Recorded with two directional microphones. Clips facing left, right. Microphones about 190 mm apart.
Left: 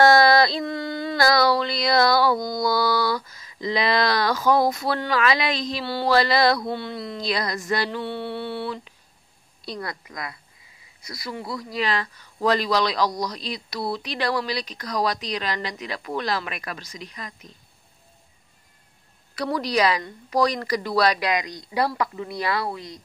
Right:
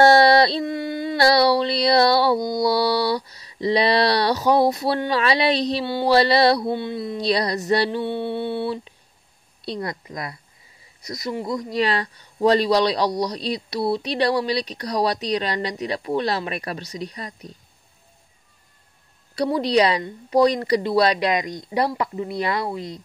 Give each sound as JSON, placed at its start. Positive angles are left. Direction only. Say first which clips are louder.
{"t": 0.0, "sound": "a sound", "louder": "right 2 dB", "side_deg": -30}
{"t": 2.6, "sound": "a man's voice", "louder": "right 2 dB", "side_deg": -30}
{"t": 7.3, "sound": "a man's voice", "louder": "right 4 dB", "side_deg": -35}
{"t": 8.0, "sound": "speech", "louder": "right 4 dB", "side_deg": -20}
{"t": 11.4, "sound": "speech", "louder": "right 6 dB", "side_deg": -20}
{"t": 11.8, "sound": "a man's voice", "louder": "right 1 dB", "side_deg": -35}
{"t": 19.3, "sound": "speech", "louder": "right 5 dB", "side_deg": -30}